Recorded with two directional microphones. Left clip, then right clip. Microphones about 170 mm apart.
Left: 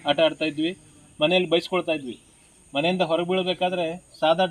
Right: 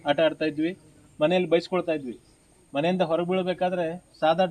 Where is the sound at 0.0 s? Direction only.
Centre (ahead or behind).